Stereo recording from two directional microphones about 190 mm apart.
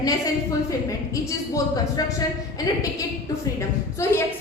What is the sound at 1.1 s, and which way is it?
A woman's voice, 15° left (ahead or behind).